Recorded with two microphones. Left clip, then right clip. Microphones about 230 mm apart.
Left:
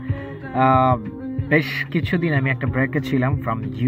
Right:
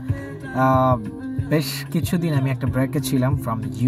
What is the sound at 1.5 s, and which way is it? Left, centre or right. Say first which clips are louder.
Speech: left 5 dB; right.